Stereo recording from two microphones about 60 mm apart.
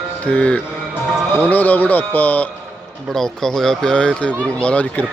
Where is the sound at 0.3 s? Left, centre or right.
Left.